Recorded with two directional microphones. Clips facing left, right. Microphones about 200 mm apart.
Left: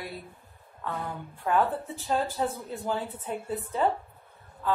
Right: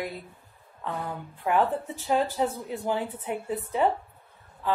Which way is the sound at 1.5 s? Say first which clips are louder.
Right 1 dB; 15° right (ahead or behind).